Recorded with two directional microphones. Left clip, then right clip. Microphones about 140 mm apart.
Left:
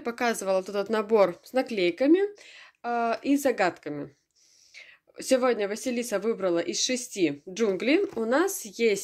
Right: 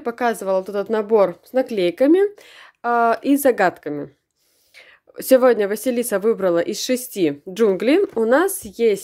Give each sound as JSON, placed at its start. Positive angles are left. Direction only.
{"t": 0.0, "sound": "a woman's voice", "side_deg": -25}